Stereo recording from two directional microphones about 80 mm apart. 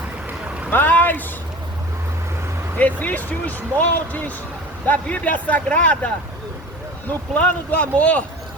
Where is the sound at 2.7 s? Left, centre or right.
Centre.